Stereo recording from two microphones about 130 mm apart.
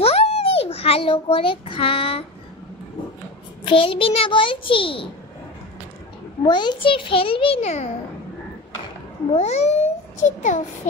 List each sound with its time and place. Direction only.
0.0 s a sound: 50° left (ahead or behind)
3.6 s a child's voice: 40° left (ahead or behind)
6.4 s a child's voice: 35° left (ahead or behind); by 7.9 s 60° left (ahead or behind)
9.3 s a child's voice: 55° left (ahead or behind)
10.2 s a child's voice: 70° left (ahead or behind)